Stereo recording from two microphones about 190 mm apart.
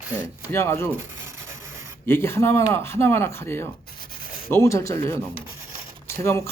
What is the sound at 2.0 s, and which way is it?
Speech, 15° left (ahead or behind).